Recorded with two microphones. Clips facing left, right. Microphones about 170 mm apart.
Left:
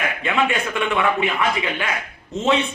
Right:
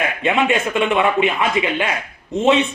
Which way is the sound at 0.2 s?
20° right (ahead or behind).